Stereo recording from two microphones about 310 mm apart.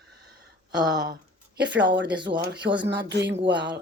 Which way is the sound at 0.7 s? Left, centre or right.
Centre.